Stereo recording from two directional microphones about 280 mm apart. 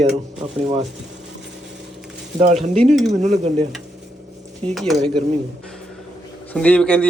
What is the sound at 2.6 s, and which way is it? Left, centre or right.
Speech, right.